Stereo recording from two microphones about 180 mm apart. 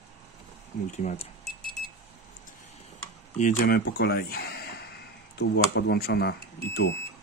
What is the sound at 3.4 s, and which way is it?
Speech, 50° left (ahead or behind).